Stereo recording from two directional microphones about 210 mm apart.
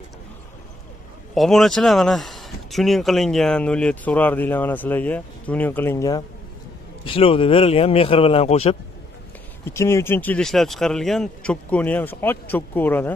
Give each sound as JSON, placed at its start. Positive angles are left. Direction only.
{"t": 1.3, "sound": "speech", "side_deg": 0}
{"t": 7.1, "sound": "speech", "side_deg": 25}
{"t": 9.7, "sound": "speech", "side_deg": 15}